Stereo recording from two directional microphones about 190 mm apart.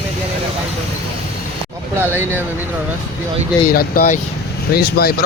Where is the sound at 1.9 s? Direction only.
10° right (ahead or behind).